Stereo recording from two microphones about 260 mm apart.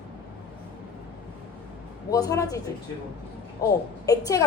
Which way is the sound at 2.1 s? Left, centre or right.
Centre.